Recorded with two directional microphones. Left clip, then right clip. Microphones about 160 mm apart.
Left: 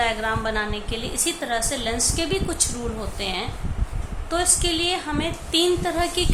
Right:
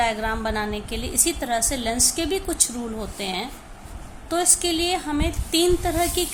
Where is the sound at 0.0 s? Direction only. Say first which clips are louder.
Even; 45° right (ahead or behind).